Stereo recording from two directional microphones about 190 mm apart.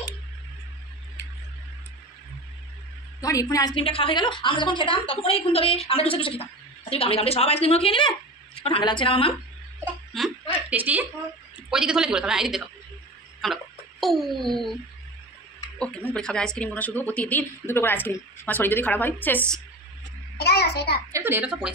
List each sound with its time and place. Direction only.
3.2 s a woman's voice: 20° left (ahead or behind)
10.7 s a woman's voice: 10° right (ahead or behind)
15.8 s speech: 5° left (ahead or behind)
20.3 s a child's voice: 55° left (ahead or behind)
21.1 s a woman's voice: 10° right (ahead or behind)